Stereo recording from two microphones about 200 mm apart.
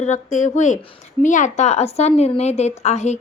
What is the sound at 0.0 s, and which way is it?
A woman's voice, 35° left (ahead or behind).